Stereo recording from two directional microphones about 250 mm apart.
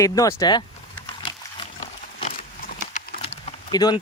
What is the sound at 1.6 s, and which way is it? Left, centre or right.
Wild animals, centre.